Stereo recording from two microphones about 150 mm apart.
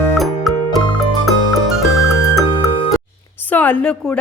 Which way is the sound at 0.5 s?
Centre (ahead or behind).